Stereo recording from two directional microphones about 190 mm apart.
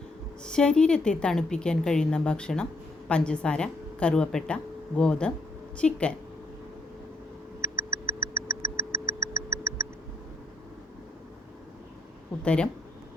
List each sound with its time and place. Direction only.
0.4 s a woman's voice: 5° left (ahead or behind)
7.6 s a sound: 15° right (ahead or behind)
12.4 s a woman's voice: 5° left (ahead or behind)